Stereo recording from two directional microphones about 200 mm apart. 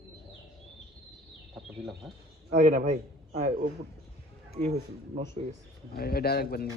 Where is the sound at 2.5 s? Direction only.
35° right (ahead or behind).